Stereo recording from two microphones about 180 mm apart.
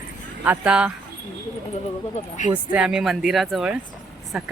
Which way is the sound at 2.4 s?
45° left (ahead or behind).